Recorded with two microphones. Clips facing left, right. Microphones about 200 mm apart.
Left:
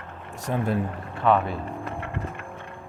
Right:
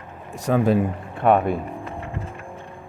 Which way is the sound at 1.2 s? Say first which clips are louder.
Right 4 dB; 55° right (ahead or behind).